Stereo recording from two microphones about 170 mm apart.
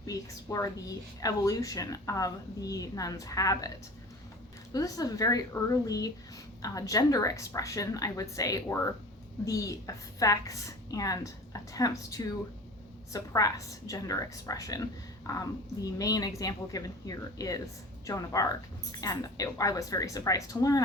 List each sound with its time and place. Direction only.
0.0 s a woman's voice: 20° left (ahead or behind)
4.7 s a woman's voice: 20° left (ahead or behind)